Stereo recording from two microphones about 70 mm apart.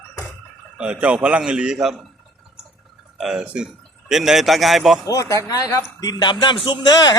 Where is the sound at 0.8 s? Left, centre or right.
Centre.